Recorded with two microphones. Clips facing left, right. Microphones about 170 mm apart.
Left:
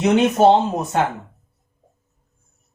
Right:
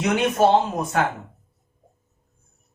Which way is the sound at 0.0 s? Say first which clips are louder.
Left 5 dB; 20° left (ahead or behind).